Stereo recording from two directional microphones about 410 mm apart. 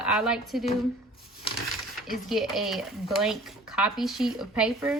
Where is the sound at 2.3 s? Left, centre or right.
Centre.